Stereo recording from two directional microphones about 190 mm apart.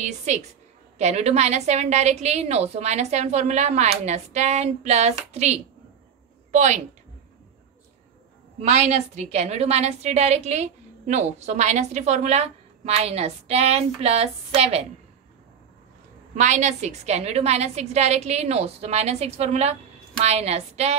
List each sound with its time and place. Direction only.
0.0 s a woman's voice: 40° right (ahead or behind)
8.5 s a woman's voice: 35° right (ahead or behind)
16.3 s a woman's voice: 40° right (ahead or behind)